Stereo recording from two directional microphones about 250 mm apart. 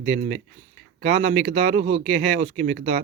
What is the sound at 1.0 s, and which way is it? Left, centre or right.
Speech, right.